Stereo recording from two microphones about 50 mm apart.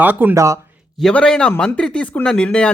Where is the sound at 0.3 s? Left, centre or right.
Right.